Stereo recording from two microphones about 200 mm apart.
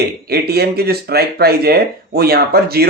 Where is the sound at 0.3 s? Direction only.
50° right (ahead or behind).